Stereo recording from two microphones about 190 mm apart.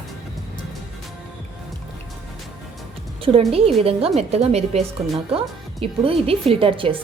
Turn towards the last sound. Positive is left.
turn(degrees=-30)  # may be behind; listen again after turning